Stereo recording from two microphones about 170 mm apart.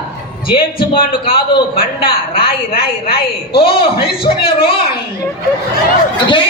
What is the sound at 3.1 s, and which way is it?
Speech, 65° left (ahead or behind).